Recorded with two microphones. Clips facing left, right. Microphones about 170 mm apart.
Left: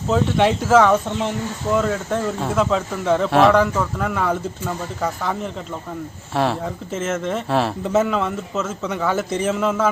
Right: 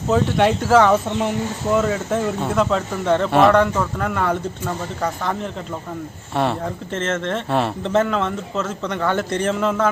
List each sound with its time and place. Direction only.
0.1 s speech: centre (ahead or behind)